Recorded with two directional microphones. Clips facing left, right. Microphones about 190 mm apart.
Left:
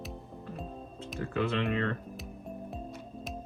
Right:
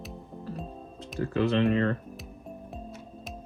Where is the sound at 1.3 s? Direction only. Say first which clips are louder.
Right 6 dB; 35° right (ahead or behind).